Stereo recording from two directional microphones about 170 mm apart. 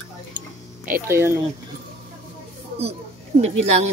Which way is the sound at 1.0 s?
15° right (ahead or behind).